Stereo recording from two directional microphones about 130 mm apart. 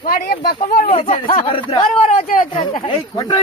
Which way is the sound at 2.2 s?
90° left.